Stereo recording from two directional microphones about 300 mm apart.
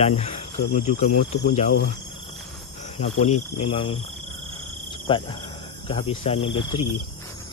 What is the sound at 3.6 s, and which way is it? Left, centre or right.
Speech, centre.